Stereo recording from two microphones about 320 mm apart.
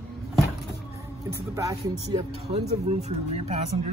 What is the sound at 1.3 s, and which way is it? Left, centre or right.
Speech, centre.